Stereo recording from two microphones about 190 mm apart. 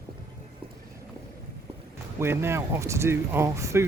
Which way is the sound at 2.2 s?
15° right (ahead or behind).